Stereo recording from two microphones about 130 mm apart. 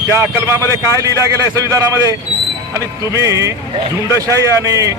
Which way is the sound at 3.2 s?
25° right (ahead or behind).